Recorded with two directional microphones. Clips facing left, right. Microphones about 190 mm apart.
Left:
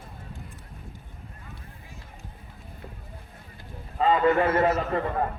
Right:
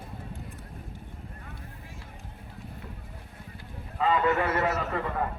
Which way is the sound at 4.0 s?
35° left (ahead or behind).